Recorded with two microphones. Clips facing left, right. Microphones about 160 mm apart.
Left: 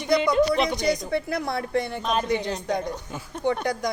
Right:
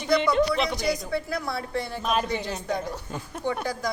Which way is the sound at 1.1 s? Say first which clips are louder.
Left 3 dB; 20° left (ahead or behind).